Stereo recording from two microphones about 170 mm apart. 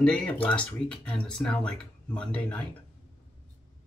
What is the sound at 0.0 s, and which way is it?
Speech, 5° left (ahead or behind).